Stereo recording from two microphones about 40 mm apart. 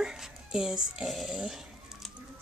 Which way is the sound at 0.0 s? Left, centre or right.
Centre.